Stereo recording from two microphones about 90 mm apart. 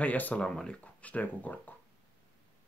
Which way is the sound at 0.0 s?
15° left (ahead or behind).